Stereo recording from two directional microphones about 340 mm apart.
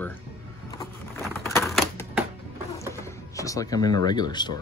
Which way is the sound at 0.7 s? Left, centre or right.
Centre.